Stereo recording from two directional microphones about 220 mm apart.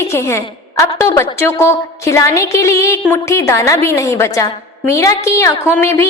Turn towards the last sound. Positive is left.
turn(degrees=10)  # may be behind; listen again after turning